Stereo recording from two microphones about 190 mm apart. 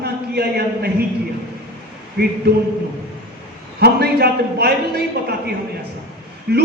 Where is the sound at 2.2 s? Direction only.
55° right (ahead or behind).